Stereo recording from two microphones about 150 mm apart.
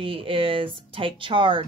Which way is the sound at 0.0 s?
35° right (ahead or behind).